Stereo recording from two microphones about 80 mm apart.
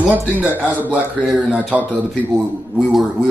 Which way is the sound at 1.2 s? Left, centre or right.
Centre.